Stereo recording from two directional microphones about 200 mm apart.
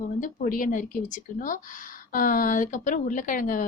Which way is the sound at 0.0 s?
40° left (ahead or behind).